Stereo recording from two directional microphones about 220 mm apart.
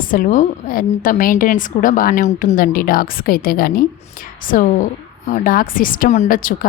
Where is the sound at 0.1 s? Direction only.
35° left (ahead or behind).